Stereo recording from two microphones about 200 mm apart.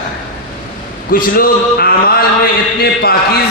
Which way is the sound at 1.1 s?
45° left (ahead or behind).